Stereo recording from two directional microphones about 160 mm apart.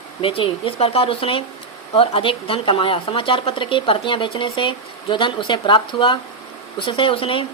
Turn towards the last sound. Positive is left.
turn(degrees=35)  # may be behind; listen again after turning